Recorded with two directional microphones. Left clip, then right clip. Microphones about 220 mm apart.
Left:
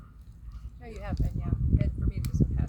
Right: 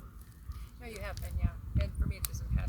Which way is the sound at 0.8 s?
15° right (ahead or behind).